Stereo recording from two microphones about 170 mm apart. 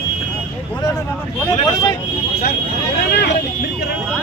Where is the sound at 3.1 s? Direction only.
80° left.